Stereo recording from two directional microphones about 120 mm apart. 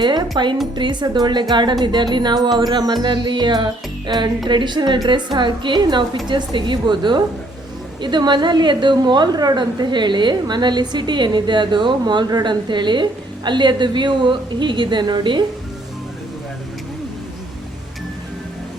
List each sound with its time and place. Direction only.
0.0 s a woman's voice: 35° right (ahead or behind)